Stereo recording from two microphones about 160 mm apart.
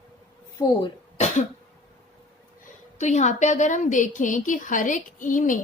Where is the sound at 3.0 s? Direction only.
45° left (ahead or behind).